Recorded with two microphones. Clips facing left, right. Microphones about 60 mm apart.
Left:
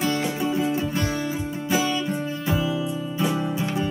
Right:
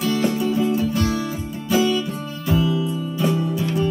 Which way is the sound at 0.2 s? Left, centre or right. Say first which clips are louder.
Right 4 dB; left.